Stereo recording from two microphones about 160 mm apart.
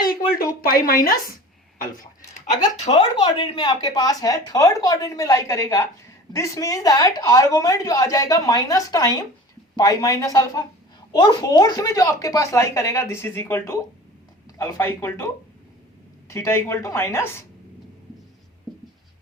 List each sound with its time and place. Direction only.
0.3 s speech: 65° left (ahead or behind)
2.8 s speech: 45° left (ahead or behind)
3.2 s a woman's voice: 30° left (ahead or behind)
16.3 s a woman's voice: 15° left (ahead or behind)